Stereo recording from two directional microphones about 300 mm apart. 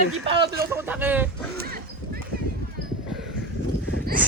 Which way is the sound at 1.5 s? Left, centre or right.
Right.